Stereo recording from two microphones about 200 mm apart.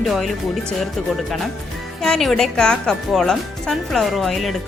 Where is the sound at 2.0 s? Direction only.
Centre (ahead or behind).